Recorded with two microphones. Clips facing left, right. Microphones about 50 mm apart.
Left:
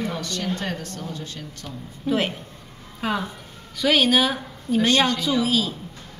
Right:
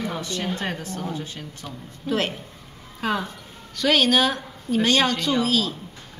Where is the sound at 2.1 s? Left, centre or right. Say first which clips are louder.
Left 1 dB; centre.